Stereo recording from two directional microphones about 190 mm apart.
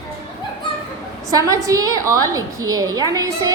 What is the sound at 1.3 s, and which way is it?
A woman's voice, 20° right (ahead or behind).